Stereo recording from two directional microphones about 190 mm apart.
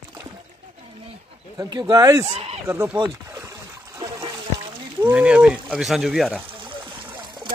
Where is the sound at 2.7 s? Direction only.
10° right (ahead or behind).